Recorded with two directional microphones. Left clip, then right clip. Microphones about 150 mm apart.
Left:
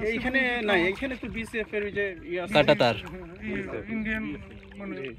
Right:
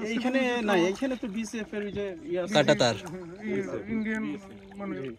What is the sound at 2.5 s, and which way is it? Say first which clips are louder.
Speech: left 2 dB; 15° left (ahead or behind).